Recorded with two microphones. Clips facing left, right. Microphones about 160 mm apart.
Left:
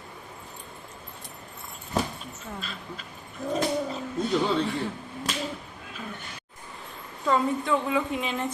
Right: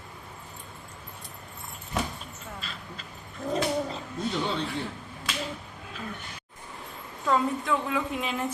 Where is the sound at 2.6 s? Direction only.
Centre (ahead or behind).